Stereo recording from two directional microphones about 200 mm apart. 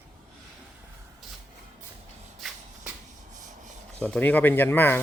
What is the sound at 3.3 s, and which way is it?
Rub, 40° right (ahead or behind).